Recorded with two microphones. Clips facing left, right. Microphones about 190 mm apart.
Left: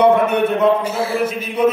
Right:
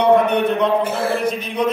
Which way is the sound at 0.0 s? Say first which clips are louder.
Left 1 dB; 5° left (ahead or behind).